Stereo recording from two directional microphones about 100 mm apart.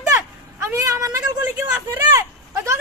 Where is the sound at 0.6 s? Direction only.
30° right (ahead or behind).